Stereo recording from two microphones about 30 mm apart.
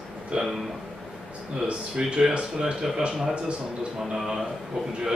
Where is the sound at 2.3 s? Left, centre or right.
Right.